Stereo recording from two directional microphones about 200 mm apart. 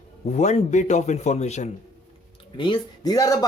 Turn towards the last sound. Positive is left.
turn(degrees=20)  # may be behind; listen again after turning